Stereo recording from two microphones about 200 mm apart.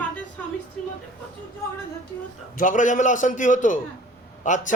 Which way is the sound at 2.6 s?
40° left (ahead or behind).